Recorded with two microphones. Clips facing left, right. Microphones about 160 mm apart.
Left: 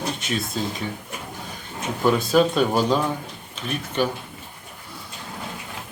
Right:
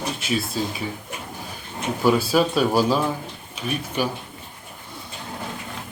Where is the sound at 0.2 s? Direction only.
5° right (ahead or behind).